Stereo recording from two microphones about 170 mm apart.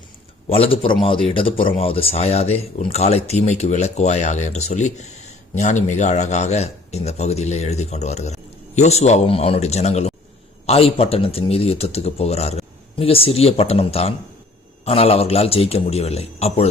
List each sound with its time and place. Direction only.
0.4 s a man's voice: 35° left (ahead or behind)